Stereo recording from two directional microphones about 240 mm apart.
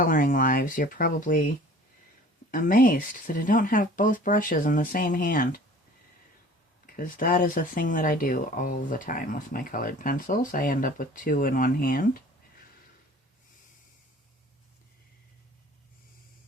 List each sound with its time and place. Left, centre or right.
0.0 s speech: left
2.5 s speech: left
6.8 s speech: left